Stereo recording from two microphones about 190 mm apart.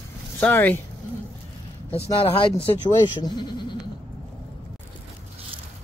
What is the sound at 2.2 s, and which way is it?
Speech, 30° left (ahead or behind).